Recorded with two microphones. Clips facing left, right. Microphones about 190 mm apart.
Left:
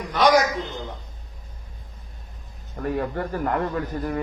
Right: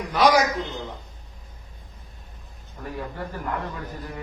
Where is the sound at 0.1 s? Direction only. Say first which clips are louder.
Left 1 dB; 5° right (ahead or behind).